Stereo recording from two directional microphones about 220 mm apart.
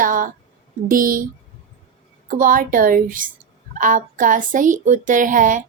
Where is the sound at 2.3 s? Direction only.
40° right (ahead or behind).